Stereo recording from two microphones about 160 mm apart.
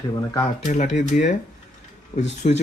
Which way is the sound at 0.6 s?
50° left (ahead or behind).